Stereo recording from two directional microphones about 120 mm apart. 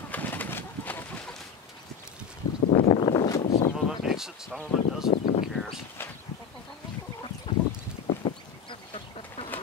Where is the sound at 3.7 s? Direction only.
5° right (ahead or behind).